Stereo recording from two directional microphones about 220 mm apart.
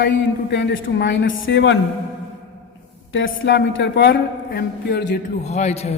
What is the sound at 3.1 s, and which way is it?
A woman's voice, 60° left (ahead or behind).